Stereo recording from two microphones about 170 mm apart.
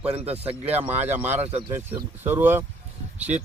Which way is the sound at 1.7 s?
15° right (ahead or behind).